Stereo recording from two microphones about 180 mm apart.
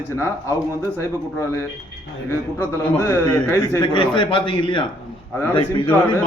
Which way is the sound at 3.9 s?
25° left (ahead or behind).